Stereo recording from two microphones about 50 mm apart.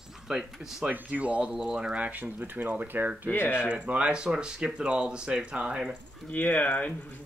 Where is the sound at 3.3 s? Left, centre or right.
Left.